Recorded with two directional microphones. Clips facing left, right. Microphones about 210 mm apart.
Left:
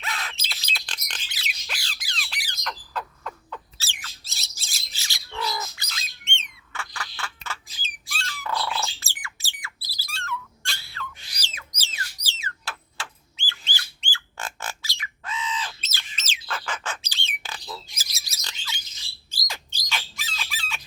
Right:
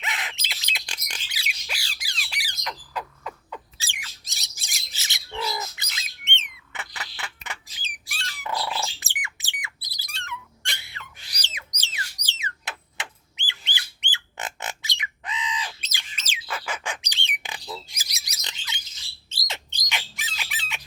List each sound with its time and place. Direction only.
0.0 s squawk: 15° right (ahead or behind)
8.1 s cat: 20° right (ahead or behind)
9.2 s a sound: 20° right (ahead or behind)
12.4 s squawk: 20° right (ahead or behind)
19.3 s bird: 25° right (ahead or behind)